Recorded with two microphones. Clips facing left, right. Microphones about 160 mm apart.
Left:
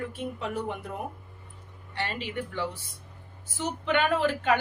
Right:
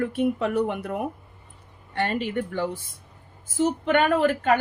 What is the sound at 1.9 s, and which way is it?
Speech, 50° right (ahead or behind).